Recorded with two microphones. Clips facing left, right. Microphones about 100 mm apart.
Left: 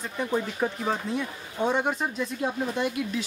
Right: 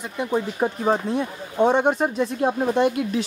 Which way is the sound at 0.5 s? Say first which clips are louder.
Right 6 dB; 30° right (ahead or behind).